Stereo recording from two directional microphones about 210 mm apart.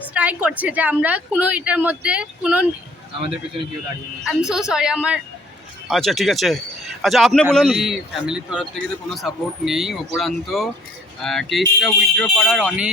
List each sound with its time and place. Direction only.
0.1 s a woman's voice: 5° right (ahead or behind)
4.4 s speech: 5° right (ahead or behind)